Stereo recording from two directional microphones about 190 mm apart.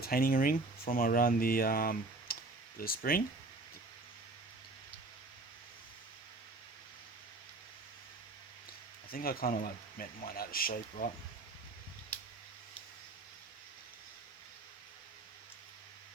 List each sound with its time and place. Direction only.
0.0 s speech: 50° left (ahead or behind)
9.0 s speech: 50° left (ahead or behind)